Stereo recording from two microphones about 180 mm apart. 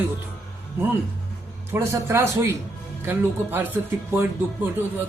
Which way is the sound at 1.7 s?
15° right (ahead or behind).